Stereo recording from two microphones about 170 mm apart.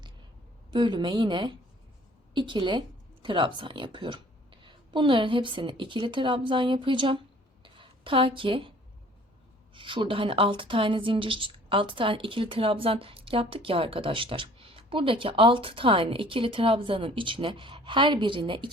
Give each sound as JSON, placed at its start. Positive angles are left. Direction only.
{"t": 0.7, "sound": "a woman's voice", "side_deg": -25}
{"t": 7.6, "sound": "a sound", "side_deg": -30}
{"t": 9.7, "sound": "speech", "side_deg": -30}